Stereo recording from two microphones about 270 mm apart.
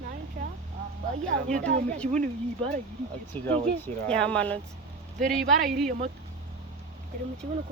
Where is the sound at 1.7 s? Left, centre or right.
Right.